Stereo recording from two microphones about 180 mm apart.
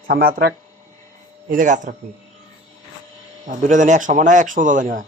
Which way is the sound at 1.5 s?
45° right (ahead or behind).